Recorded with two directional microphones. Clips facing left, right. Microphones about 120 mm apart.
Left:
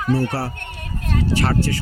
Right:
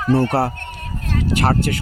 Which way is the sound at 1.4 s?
50° right (ahead or behind).